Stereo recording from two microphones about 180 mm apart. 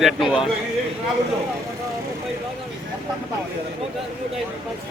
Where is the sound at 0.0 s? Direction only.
Centre (ahead or behind).